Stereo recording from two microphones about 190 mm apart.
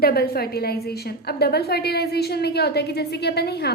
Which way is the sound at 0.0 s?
55° left (ahead or behind).